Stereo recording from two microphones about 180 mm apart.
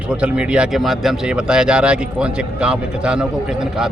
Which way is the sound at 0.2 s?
5° right (ahead or behind).